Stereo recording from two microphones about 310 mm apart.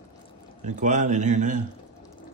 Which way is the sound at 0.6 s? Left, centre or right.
Right.